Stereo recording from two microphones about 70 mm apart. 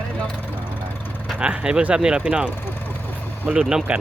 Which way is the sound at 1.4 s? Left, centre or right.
Centre.